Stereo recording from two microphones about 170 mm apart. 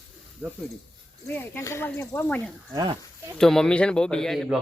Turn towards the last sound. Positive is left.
turn(degrees=0)  # may be behind; listen again after turning